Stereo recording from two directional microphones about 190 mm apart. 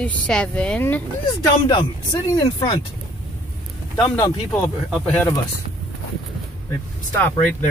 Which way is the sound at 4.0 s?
20° left (ahead or behind).